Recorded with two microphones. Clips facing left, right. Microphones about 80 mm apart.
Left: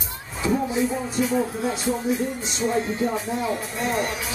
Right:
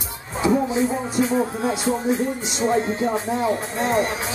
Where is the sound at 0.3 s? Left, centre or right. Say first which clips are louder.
Right 4 dB; right.